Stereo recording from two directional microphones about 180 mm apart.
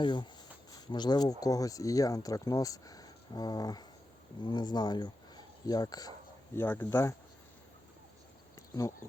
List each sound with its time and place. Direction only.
0.0 s speech: 25° left (ahead or behind)